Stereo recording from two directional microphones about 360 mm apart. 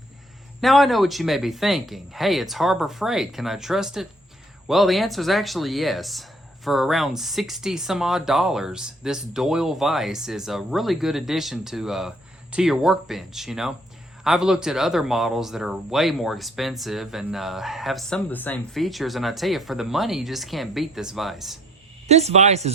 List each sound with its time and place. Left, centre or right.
0.6 s speech: centre
22.1 s speech: centre